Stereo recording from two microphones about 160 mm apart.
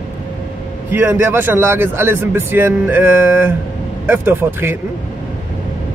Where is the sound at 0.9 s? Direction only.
15° right (ahead or behind).